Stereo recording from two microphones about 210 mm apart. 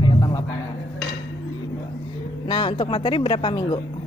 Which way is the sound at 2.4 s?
20° left (ahead or behind).